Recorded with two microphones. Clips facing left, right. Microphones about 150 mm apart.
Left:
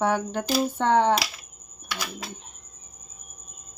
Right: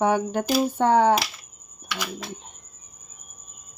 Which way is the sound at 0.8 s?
10° right (ahead or behind).